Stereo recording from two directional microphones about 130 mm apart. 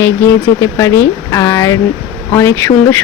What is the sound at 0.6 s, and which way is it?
Speech, 25° left (ahead or behind).